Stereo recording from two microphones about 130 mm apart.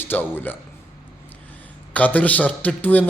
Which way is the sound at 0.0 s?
15° left (ahead or behind).